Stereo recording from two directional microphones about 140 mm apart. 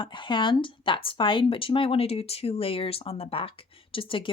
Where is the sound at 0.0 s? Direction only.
35° left (ahead or behind).